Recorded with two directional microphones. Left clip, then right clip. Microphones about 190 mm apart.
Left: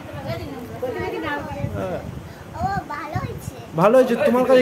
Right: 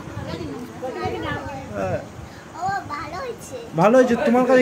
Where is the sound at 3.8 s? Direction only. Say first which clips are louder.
Even; 5° left (ahead or behind).